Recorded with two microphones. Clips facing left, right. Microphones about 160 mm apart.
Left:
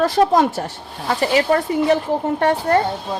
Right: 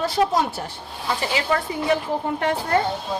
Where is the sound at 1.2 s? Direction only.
40° left (ahead or behind).